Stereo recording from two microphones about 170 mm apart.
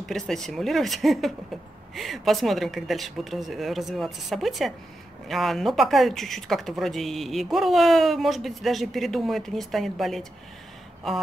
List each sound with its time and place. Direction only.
0.0 s speech: centre (ahead or behind)